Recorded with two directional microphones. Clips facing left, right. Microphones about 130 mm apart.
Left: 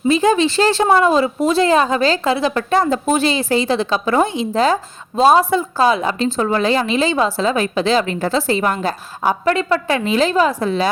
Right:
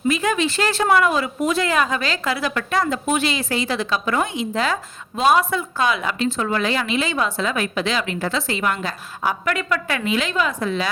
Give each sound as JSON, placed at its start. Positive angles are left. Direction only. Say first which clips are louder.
{"t": 0.1, "sound": "speech", "louder": "left 7 dB", "side_deg": 30}